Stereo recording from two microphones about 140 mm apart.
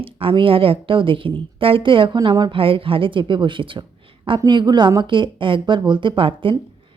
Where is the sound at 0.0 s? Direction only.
40° right (ahead or behind).